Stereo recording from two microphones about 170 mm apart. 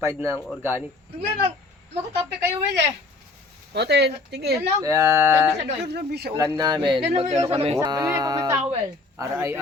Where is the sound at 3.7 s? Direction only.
80° right.